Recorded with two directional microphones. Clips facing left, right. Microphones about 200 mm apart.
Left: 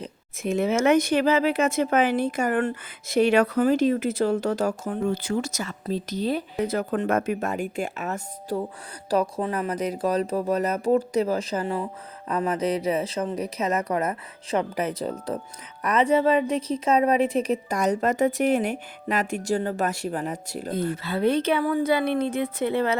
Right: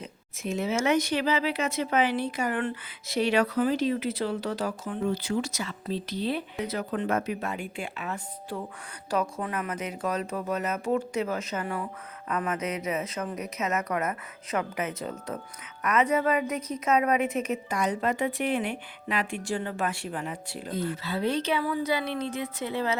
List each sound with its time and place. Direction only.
0.4 s a woman's voice: 55° left (ahead or behind)